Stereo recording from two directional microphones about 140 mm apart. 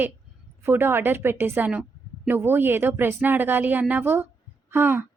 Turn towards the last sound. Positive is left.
turn(degrees=-15)  # may be behind; listen again after turning